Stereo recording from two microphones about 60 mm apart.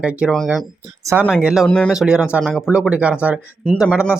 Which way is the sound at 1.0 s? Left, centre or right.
Right.